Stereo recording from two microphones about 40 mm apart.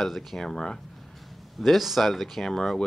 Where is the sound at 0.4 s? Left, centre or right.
Centre.